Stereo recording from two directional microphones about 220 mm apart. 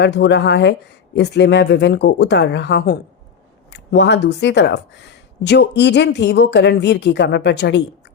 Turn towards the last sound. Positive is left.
turn(degrees=50)  # may be behind; listen again after turning